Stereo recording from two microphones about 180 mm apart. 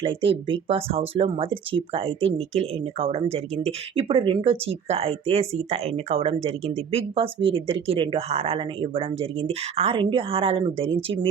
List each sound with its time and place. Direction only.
0.0 s speech: 30° right (ahead or behind)